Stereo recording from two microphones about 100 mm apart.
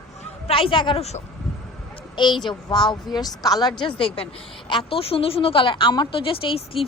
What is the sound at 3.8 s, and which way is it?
A woman's voice, 60° left (ahead or behind).